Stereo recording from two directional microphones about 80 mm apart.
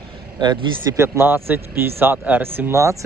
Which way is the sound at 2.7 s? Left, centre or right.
Right.